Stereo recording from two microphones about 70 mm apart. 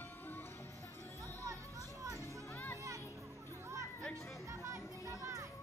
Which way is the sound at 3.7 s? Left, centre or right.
Right.